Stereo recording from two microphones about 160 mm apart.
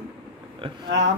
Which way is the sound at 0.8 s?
90° right.